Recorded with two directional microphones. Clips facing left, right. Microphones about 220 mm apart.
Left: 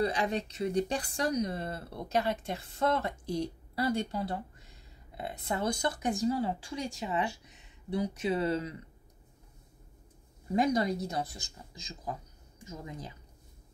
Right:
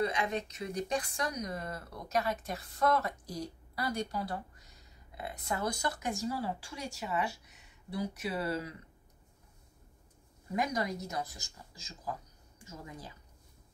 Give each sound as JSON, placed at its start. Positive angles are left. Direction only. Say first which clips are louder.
{"t": 0.0, "sound": "speech", "louder": "left 2 dB", "side_deg": 35}
{"t": 10.5, "sound": "speech", "louder": "left 6 dB", "side_deg": 30}